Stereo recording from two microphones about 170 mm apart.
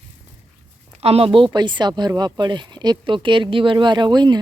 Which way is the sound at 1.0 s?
35° right (ahead or behind).